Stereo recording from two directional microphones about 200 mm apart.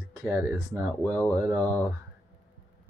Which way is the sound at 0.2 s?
15° right (ahead or behind).